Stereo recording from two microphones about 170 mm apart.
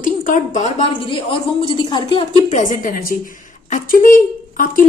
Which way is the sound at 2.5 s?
50° left (ahead or behind).